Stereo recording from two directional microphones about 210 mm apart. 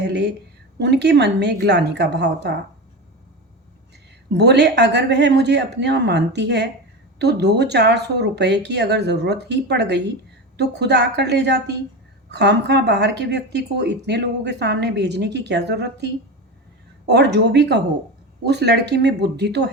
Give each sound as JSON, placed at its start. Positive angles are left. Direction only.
{"t": 0.8, "sound": "a woman's voice", "side_deg": -55}
{"t": 4.3, "sound": "a woman's voice", "side_deg": -55}
{"t": 17.1, "sound": "a woman's voice", "side_deg": -50}